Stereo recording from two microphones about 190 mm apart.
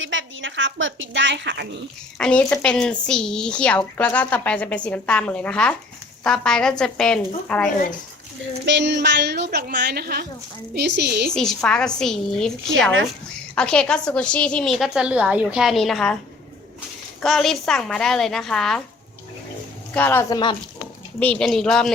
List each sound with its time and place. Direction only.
0.0 s a woman's voice: 85° right
2.1 s a woman's voice: 5° left (ahead or behind)
8.6 s a woman's voice: 70° right (ahead or behind)
11.3 s a woman's voice: 5° left (ahead or behind)
13.6 s a woman's voice: 5° left (ahead or behind)
17.2 s a woman's voice: centre (ahead or behind)
19.9 s a woman's voice: 10° left (ahead or behind)